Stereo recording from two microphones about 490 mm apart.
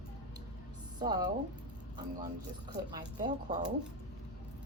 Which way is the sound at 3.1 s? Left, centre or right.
Centre.